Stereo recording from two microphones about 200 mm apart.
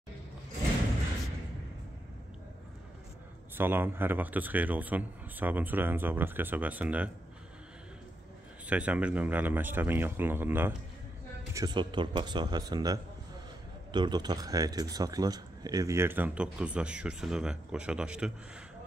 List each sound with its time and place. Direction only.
3.5 s speech: 10° right (ahead or behind)
8.6 s speech: 5° right (ahead or behind)
11.5 s speech: 20° right (ahead or behind); by 18.3 s 5° right (ahead or behind)